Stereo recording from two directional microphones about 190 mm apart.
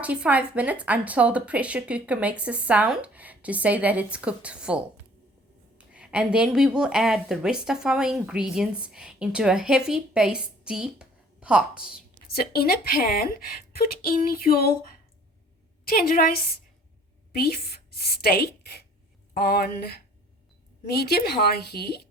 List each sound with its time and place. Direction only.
0.0 s a woman's voice: 5° right (ahead or behind)
12.3 s speech: 55° left (ahead or behind)
17.3 s a woman's voice: 55° left (ahead or behind)